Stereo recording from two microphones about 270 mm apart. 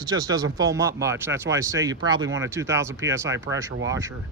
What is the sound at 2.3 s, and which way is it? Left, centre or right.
Speech, right.